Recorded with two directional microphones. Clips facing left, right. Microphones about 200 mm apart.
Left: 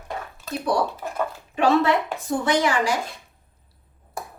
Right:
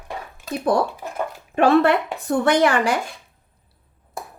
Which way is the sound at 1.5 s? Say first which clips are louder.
Right 4 dB; 55° right (ahead or behind).